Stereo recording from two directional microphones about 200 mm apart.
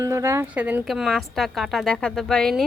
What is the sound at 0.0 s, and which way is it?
Speech, 15° right (ahead or behind).